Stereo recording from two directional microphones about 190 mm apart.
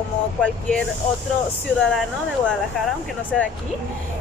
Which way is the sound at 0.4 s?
5° left (ahead or behind).